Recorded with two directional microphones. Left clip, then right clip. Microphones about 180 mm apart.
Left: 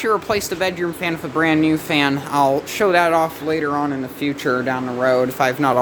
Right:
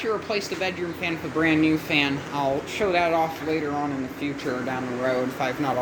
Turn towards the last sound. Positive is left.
turn(degrees=60)  # may be behind; listen again after turning